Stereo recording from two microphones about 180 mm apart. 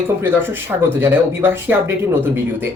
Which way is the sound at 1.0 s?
10° right (ahead or behind).